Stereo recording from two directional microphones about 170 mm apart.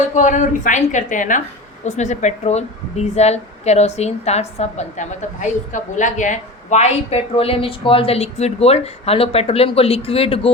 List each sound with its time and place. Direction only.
0.1 s a woman's voice: 45° left (ahead or behind)